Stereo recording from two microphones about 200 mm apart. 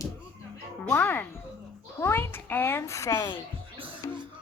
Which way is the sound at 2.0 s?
10° left (ahead or behind).